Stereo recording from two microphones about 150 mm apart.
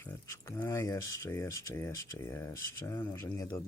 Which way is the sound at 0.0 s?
20° left (ahead or behind).